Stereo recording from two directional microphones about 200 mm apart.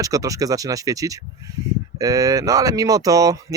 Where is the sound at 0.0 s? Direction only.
15° right (ahead or behind).